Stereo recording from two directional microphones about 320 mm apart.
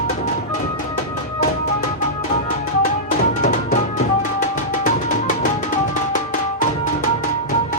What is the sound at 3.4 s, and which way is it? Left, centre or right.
Music, left.